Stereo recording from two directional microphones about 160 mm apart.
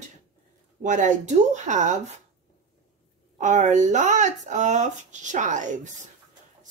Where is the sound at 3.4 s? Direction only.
50° right (ahead or behind).